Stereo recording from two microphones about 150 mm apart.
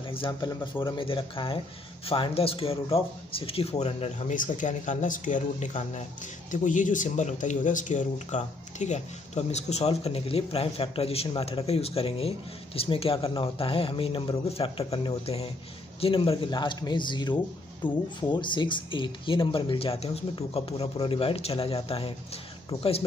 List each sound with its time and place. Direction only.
0.1 s speech: 30° left (ahead or behind)
4.4 s speech: 55° left (ahead or behind); by 17.4 s 30° left (ahead or behind)
17.8 s speech: 10° left (ahead or behind)
18.3 s speech: 30° left (ahead or behind)